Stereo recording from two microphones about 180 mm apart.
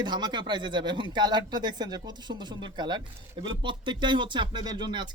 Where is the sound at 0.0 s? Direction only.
25° right (ahead or behind).